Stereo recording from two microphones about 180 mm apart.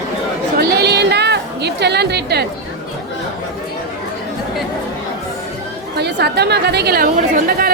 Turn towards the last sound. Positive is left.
turn(degrees=-55)  # may be behind; listen again after turning